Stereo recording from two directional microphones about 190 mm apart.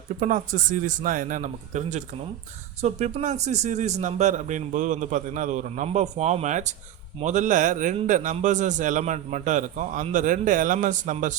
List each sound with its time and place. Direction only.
0.2 s a man's voice: 40° right (ahead or behind)